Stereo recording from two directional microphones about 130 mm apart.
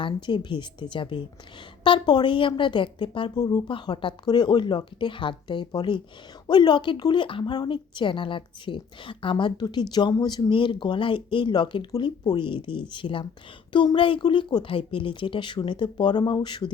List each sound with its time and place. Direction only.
0.0 s a woman's voice: 40° left (ahead or behind)